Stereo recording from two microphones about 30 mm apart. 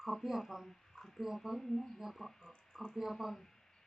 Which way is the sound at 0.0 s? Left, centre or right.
Centre.